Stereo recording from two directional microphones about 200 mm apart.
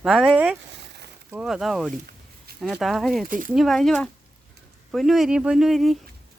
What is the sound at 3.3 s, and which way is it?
Speech, 40° right (ahead or behind).